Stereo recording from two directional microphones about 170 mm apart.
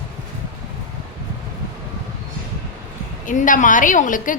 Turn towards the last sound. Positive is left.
turn(degrees=50)  # may be behind; listen again after turning